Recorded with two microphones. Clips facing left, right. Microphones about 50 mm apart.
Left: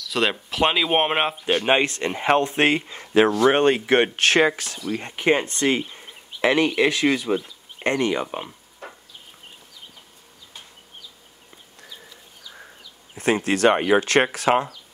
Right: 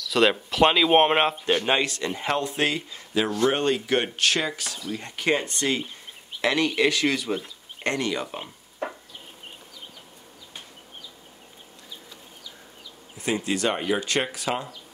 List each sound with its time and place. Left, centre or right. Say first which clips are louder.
0.1 s speech: right 2 dB; centre
1.6 s speech: left 4 dB; left
4.7 s speech: left 4 dB; left
13.2 s speech: left 7 dB; left